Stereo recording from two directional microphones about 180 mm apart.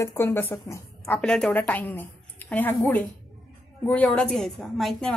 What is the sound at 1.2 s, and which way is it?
A woman's voice, 5° left (ahead or behind).